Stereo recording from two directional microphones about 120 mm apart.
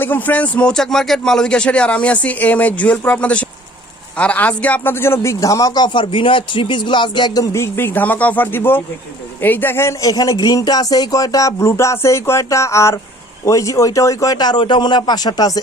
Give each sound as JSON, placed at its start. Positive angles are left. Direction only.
{"t": 0.0, "sound": "speech", "side_deg": 15}
{"t": 7.5, "sound": "a man's voice", "side_deg": 20}